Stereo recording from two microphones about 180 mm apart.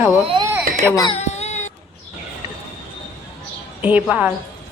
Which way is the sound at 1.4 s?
40° left (ahead or behind).